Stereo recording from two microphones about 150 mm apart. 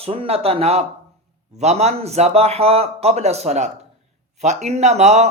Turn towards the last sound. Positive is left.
turn(degrees=-50)  # may be behind; listen again after turning